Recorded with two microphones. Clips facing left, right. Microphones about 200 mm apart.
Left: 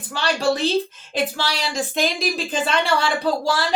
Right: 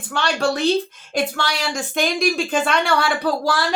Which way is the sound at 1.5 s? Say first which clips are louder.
Even; 30° left (ahead or behind).